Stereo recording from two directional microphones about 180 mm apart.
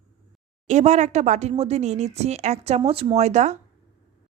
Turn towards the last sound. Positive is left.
turn(degrees=-40)  # may be behind; listen again after turning